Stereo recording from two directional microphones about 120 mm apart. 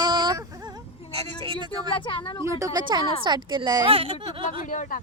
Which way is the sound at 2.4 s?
30° right (ahead or behind).